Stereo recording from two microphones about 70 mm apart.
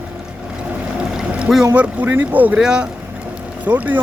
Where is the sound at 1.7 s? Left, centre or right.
Right.